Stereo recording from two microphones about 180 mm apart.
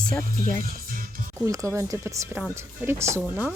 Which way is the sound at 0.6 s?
50° right (ahead or behind).